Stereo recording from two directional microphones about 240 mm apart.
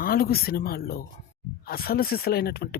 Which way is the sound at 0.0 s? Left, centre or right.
Left.